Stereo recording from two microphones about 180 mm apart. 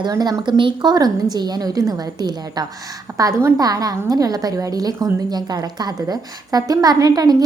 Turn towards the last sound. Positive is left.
turn(degrees=-20)  # may be behind; listen again after turning